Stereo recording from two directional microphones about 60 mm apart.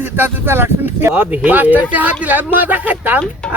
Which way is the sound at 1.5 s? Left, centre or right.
Right.